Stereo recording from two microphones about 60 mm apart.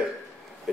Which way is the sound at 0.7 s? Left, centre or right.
Centre.